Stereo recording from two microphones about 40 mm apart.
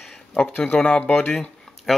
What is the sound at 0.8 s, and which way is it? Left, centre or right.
Speech, left.